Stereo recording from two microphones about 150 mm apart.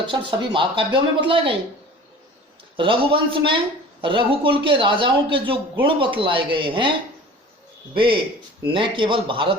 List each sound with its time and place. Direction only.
0.0 s speech: 35° right (ahead or behind)
2.7 s speech: 35° right (ahead or behind)
7.9 s speech: 35° right (ahead or behind)